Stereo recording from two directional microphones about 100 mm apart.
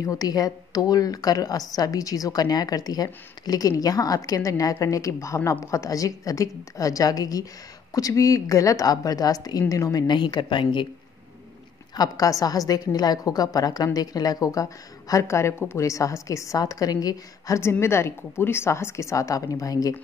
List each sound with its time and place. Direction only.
0.0 s speech: 40° left (ahead or behind)
10.0 s a woman's voice: 50° left (ahead or behind)
11.9 s speech: 40° left (ahead or behind)
17.6 s a woman's voice: 25° left (ahead or behind)